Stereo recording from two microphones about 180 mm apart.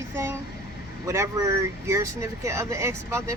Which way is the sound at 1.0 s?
15° right (ahead or behind).